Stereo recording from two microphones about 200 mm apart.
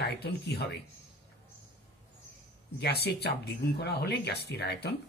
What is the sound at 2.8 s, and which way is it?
Speech, 55° left (ahead or behind).